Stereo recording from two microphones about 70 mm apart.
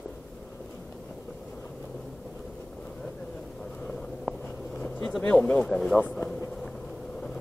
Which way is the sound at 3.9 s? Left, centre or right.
Left.